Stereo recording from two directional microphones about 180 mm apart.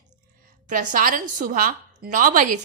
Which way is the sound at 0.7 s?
45° right (ahead or behind).